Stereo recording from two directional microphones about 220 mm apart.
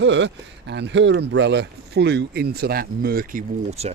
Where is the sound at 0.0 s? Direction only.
55° right (ahead or behind).